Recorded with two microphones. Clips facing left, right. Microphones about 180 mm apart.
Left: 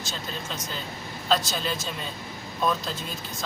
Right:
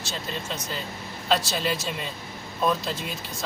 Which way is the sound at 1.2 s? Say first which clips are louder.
Right 1 dB; 5° right (ahead or behind).